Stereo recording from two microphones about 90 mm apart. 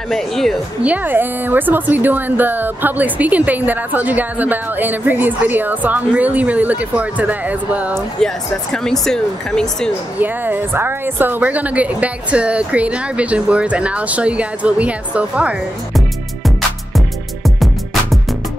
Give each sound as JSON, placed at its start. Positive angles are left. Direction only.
{"t": 0.1, "sound": "speech", "side_deg": 5}
{"t": 0.8, "sound": "a woman's voice", "side_deg": -20}
{"t": 8.2, "sound": "speech", "side_deg": 5}
{"t": 10.1, "sound": "a woman's voice", "side_deg": -20}